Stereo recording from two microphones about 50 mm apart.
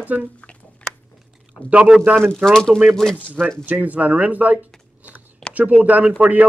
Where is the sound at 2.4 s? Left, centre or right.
Centre.